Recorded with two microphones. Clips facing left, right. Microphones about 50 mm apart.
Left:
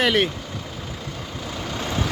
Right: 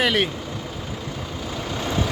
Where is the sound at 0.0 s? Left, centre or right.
Centre.